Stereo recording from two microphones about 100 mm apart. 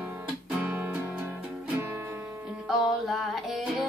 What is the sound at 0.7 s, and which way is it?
Music, 15° right (ahead or behind).